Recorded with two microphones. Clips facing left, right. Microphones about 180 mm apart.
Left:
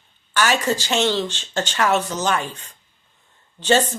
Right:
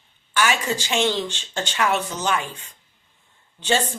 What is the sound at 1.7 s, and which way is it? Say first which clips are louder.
Speech: left 2 dB; 40° left (ahead or behind).